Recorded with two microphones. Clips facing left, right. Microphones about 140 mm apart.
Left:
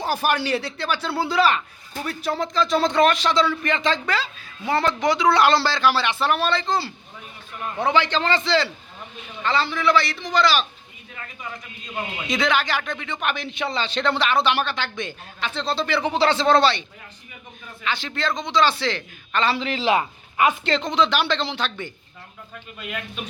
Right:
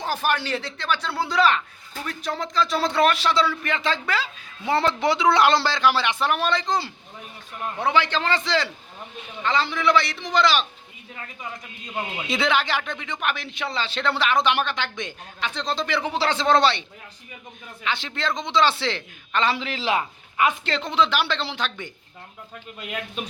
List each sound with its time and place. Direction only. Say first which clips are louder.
0.0 s speech: left 2 dB; 10° left (ahead or behind); by 4.3 s 10° right (ahead or behind)
4.6 s a man's voice: even; 25° right (ahead or behind)
12.3 s speech: left 1 dB; 25° right (ahead or behind)
15.6 s speech: left 2 dB; 5° left (ahead or behind)
16.0 s speech: left 6 dB; 5° right (ahead or behind); by 16.8 s 20° right (ahead or behind)
17.9 s a man's voice: left 2 dB; 20° right (ahead or behind)
19.6 s speech: left 4 dB; centre (ahead or behind)